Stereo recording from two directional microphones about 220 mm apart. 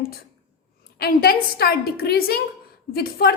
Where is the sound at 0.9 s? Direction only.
45° left (ahead or behind).